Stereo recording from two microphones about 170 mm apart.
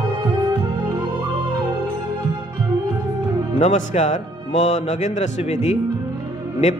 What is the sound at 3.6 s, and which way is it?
A man's voice, 45° left (ahead or behind).